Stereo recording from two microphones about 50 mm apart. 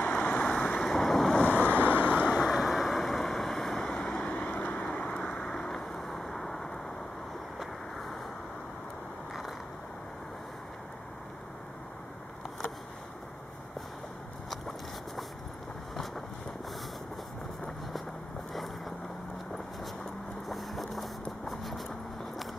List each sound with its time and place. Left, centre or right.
0.1 s vehicle: left
0.8 s wind noise: centre
1.6 s vehicle: right
2.3 s vehicle: centre; by 4.5 s left
4.5 s vehicle: left
4.9 s vehicle: left; by 8.2 s centre
14.5 s a sound: centre
18.5 s vehicle: centre
20.4 s vehicle: centre